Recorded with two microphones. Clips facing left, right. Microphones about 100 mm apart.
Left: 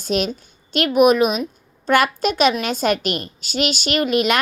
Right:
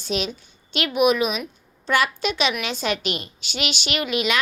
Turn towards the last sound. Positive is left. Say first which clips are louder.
# left 5 dB
turn(degrees=45)  # may be behind; listen again after turning